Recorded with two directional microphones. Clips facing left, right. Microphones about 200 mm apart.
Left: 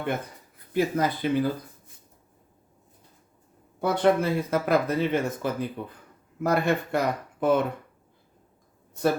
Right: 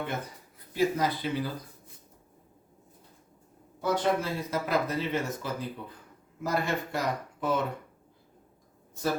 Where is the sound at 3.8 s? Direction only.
60° left (ahead or behind).